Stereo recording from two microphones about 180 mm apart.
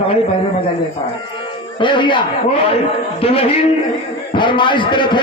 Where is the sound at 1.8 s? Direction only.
25° left (ahead or behind).